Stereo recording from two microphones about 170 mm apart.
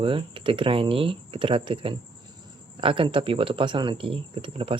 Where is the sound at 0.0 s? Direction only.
30° right (ahead or behind).